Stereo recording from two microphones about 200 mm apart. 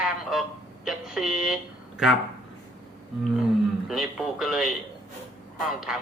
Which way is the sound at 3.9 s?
Centre (ahead or behind).